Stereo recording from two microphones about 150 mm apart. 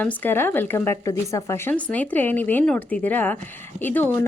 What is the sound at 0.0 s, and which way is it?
Speech, 10° left (ahead or behind).